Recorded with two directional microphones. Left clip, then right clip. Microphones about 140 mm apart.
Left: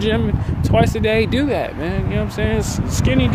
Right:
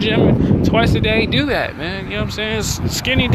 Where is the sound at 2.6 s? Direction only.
30° left (ahead or behind).